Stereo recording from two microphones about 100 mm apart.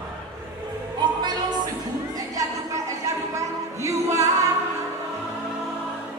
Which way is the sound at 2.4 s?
30° right (ahead or behind).